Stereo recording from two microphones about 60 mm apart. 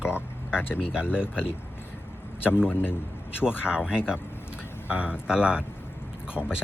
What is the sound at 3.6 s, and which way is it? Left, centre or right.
A man's voice, centre.